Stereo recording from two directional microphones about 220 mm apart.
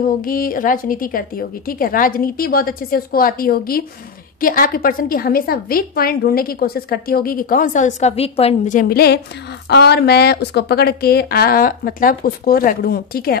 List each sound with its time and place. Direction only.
0.2 s a woman's voice: 40° left (ahead or behind)